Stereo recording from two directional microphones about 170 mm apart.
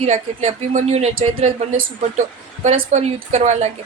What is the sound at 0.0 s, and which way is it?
A woman's voice, 35° right (ahead or behind).